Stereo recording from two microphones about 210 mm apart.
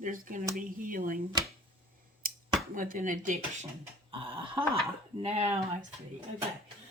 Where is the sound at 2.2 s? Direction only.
40° right (ahead or behind).